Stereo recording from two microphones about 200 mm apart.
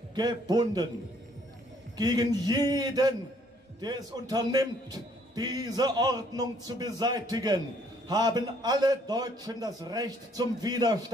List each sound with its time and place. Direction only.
0.1 s a man's voice: 20° right (ahead or behind)
2.0 s a man's voice: 20° right (ahead or behind)